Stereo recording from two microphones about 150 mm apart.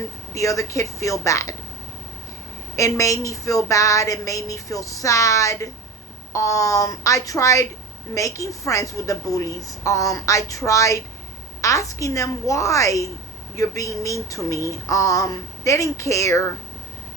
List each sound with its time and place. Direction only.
0.3 s a woman's voice: 20° left (ahead or behind)
2.7 s a woman's voice: 20° left (ahead or behind)